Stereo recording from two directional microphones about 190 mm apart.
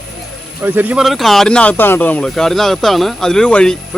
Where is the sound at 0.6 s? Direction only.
10° right (ahead or behind).